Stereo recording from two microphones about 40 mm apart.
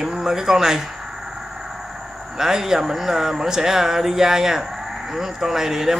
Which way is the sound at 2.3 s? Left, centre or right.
Centre.